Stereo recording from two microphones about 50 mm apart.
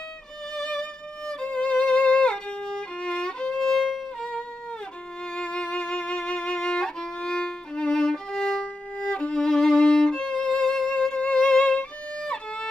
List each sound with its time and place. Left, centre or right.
0.6 s music: centre
4.2 s music: left
5.3 s violin: centre
8.9 s violin: left
9.4 s music: centre
11.6 s violin: left